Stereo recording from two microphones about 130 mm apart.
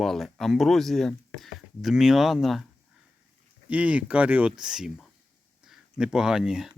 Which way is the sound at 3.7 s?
10° right (ahead or behind).